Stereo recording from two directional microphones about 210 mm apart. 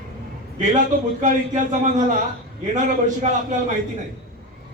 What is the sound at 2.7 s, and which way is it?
Speech, 35° right (ahead or behind).